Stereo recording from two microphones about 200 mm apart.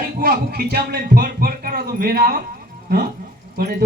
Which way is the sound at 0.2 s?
50° right (ahead or behind).